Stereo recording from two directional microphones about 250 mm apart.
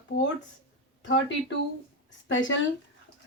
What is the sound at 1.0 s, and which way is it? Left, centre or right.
Speech, left.